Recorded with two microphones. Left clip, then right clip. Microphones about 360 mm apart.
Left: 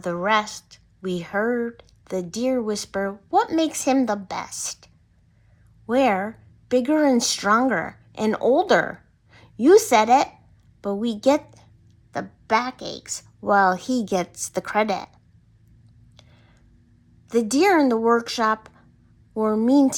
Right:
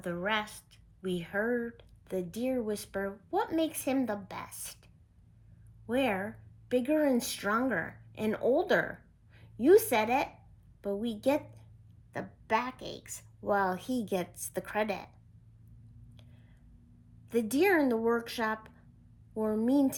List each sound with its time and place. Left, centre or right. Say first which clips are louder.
0.0 s a woman's voice: left 11 dB; centre
5.9 s a woman's voice: left 11 dB; centre
17.2 s speech: left 9 dB; centre